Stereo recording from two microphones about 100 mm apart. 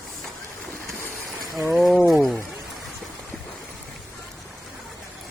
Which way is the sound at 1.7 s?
5° right (ahead or behind).